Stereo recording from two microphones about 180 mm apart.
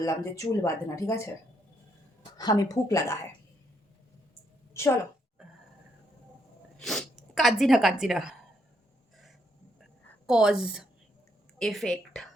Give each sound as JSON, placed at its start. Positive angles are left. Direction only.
{"t": 0.0, "sound": "speech", "side_deg": 15}
{"t": 2.4, "sound": "speech", "side_deg": 20}
{"t": 4.7, "sound": "a woman's voice", "side_deg": 15}
{"t": 6.7, "sound": "speech", "side_deg": 0}
{"t": 10.2, "sound": "a woman's voice", "side_deg": -5}